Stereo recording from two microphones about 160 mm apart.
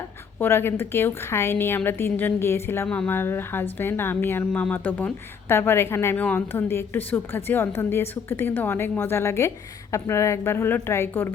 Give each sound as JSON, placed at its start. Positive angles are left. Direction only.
{"t": 0.3, "sound": "a woman's voice", "side_deg": 15}